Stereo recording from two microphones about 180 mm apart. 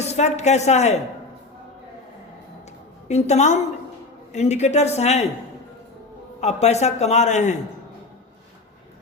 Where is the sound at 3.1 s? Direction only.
35° left (ahead or behind).